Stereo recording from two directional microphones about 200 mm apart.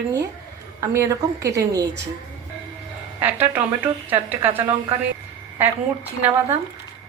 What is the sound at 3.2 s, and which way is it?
A woman's voice, 10° right (ahead or behind).